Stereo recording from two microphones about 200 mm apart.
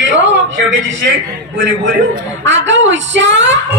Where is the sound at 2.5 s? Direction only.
65° right (ahead or behind).